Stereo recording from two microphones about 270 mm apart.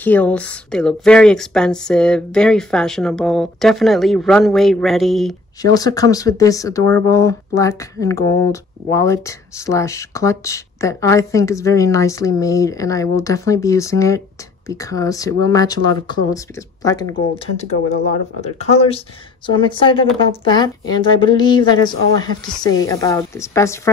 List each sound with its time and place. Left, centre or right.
0.0 s speech: centre
5.6 s speech: centre
18.4 s speech: left